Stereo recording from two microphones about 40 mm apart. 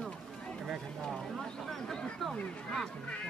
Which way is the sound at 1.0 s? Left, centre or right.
Centre.